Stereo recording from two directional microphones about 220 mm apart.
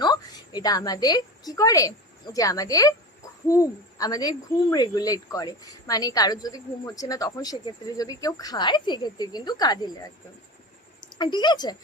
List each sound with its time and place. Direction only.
0.0 s a woman's voice: 20° left (ahead or behind)